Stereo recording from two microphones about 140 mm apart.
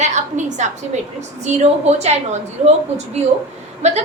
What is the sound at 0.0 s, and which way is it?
A woman's voice, 60° right (ahead or behind).